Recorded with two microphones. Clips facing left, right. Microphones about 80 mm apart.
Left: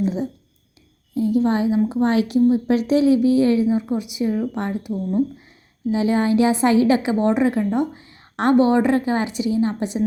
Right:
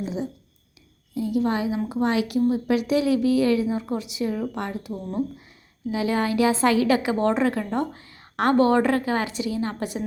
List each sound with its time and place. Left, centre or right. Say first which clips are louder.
0.0 s a sound: left 6 dB; left
1.1 s a woman's voice: left 5 dB; left
5.9 s a woman's voice: left 5 dB; left